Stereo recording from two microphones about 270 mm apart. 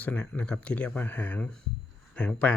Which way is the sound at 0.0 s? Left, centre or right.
Centre.